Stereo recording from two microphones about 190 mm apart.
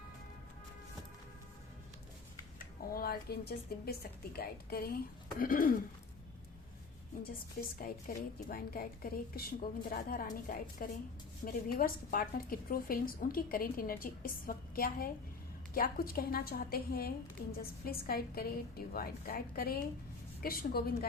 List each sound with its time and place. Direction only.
2.9 s a woman's voice: 50° left (ahead or behind)
7.8 s a woman's voice: 50° left (ahead or behind)